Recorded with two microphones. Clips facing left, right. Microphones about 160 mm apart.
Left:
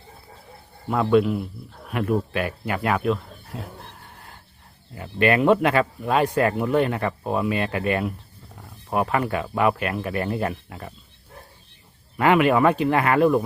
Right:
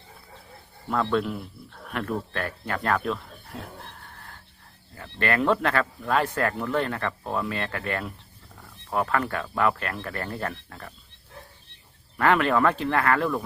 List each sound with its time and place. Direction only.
0.9 s speech: 10° left (ahead or behind)
3.5 s a sound: 10° left (ahead or behind)
4.9 s speech: 15° left (ahead or behind)
12.1 s speech: 15° left (ahead or behind)